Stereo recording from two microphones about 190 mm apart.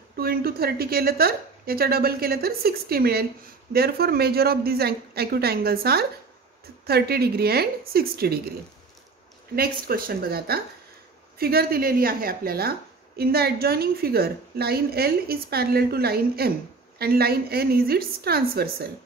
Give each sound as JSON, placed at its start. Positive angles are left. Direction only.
{"t": 0.2, "sound": "a woman's voice", "side_deg": -55}
{"t": 9.6, "sound": "a woman's voice", "side_deg": -50}